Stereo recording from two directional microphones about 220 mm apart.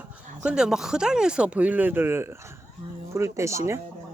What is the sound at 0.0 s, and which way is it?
Speech, 5° right (ahead or behind).